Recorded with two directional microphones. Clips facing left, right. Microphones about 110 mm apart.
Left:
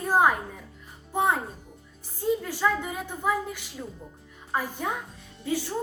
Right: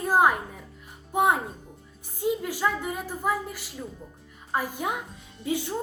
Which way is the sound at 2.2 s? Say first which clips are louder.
Left 1 dB; 10° right (ahead or behind).